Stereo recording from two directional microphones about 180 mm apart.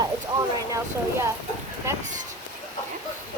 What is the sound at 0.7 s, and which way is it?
Speech, 15° right (ahead or behind).